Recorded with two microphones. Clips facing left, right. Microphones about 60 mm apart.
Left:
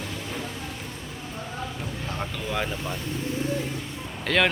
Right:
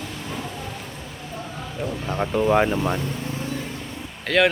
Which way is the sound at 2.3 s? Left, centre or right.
Right.